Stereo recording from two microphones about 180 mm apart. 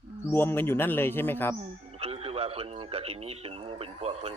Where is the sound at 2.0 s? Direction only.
35° right (ahead or behind).